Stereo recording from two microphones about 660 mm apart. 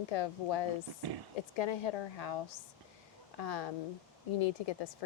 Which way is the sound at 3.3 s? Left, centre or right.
Left.